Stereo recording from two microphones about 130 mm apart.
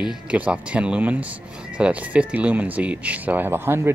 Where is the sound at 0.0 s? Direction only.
5° right (ahead or behind).